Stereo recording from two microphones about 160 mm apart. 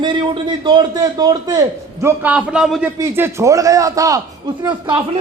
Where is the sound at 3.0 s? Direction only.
15° right (ahead or behind).